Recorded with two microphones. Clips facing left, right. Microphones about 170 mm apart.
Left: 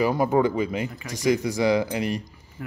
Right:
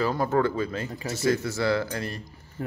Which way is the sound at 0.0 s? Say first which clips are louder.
Left 3 dB; 15° left (ahead or behind).